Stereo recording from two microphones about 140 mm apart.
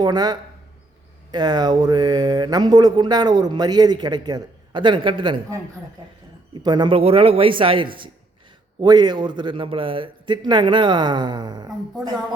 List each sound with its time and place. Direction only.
0.0 s speech: 30° right (ahead or behind)
6.5 s a man's voice: 30° right (ahead or behind)